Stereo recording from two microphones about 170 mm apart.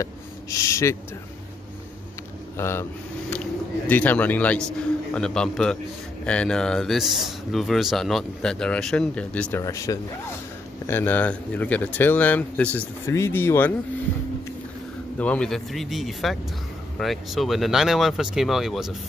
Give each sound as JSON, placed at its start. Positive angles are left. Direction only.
{"t": 0.0, "sound": "speech", "side_deg": 20}
{"t": 2.5, "sound": "a man's voice", "side_deg": 15}
{"t": 15.1, "sound": "a man's voice", "side_deg": 5}